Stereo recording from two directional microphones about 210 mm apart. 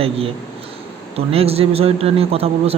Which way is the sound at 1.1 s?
30° right (ahead or behind).